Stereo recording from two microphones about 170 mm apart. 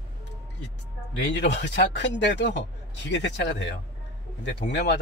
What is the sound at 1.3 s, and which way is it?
A man's voice, 90° left.